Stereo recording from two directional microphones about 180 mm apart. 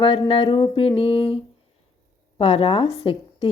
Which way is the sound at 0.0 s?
30° left (ahead or behind).